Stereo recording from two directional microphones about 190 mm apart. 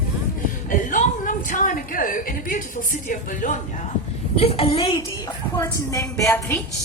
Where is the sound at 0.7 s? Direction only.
45° left (ahead or behind).